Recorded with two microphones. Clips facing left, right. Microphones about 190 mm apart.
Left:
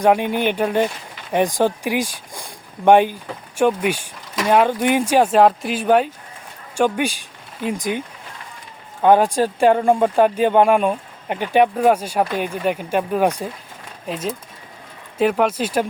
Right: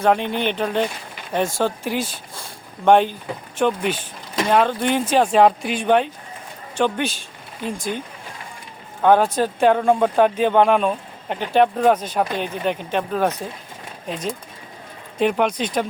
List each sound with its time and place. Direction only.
0.0 s speech: 10° left (ahead or behind)